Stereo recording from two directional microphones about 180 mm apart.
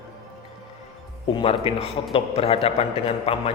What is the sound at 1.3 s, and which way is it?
A man's voice, 30° left (ahead or behind).